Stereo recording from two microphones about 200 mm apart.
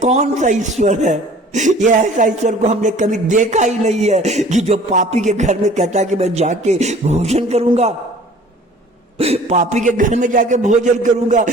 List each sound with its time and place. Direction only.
0.0 s a man's voice: 35° right (ahead or behind)
9.1 s a man's voice: 30° right (ahead or behind)